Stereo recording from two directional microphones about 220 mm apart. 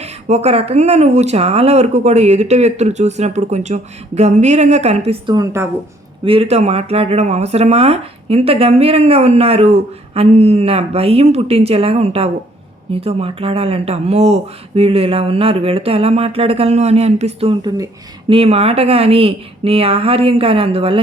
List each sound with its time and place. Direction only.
0.0 s speech: 30° right (ahead or behind)
6.2 s speech: 25° right (ahead or behind)